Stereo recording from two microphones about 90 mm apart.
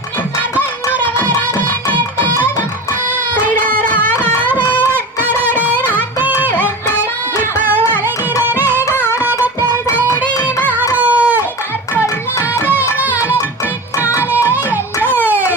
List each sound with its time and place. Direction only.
0.9 s music: 20° left (ahead or behind)
4.7 s music: 20° right (ahead or behind)
7.5 s music: 20° right (ahead or behind)
10.4 s music: 20° left (ahead or behind)
10.9 s a sound: 15° right (ahead or behind)
12.4 s music: 30° left (ahead or behind)
14.1 s music: 35° left (ahead or behind)
15.0 s music: 20° right (ahead or behind)